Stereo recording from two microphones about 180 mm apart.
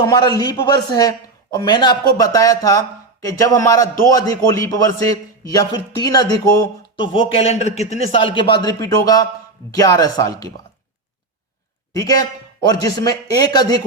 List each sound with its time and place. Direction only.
0.0 s a man's voice: 20° left (ahead or behind)
7.0 s a man's voice: 30° left (ahead or behind)
11.9 s a man's voice: 20° left (ahead or behind)